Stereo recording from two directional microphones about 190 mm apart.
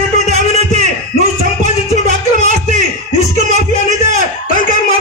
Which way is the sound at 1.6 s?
40° right (ahead or behind).